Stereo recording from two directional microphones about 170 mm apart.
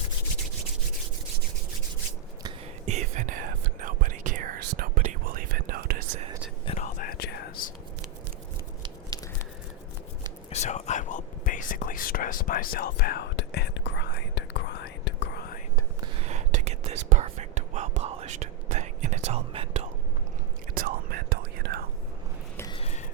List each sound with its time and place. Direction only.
2.8 s whispering: 45° right (ahead or behind); by 6.0 s 60° right (ahead or behind)
6.7 s whispering: 50° left (ahead or behind); by 7.4 s 70° left (ahead or behind)
10.5 s whispering: 40° left (ahead or behind); by 15.6 s 65° left (ahead or behind)
16.0 s whispering: 35° right (ahead or behind)
20.7 s whispering: 60° right (ahead or behind)
22.7 s a sound: 40° left (ahead or behind)